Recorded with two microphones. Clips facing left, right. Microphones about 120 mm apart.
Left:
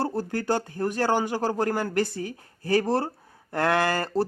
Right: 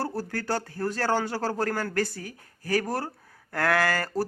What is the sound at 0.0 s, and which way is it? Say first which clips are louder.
Speech: left 3 dB; 20° left (ahead or behind).